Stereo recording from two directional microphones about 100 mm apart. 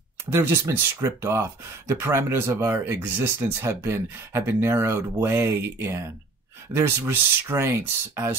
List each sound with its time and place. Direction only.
0.3 s speech: 25° right (ahead or behind)